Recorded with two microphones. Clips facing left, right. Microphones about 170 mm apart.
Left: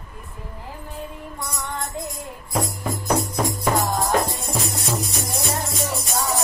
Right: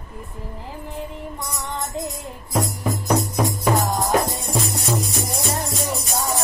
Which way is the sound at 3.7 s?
20° right (ahead or behind).